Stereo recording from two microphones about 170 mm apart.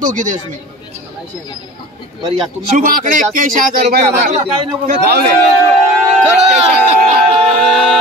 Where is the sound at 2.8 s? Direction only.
55° right (ahead or behind); by 4.7 s 35° right (ahead or behind).